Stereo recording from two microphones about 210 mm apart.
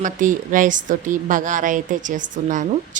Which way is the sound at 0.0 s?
40° right (ahead or behind).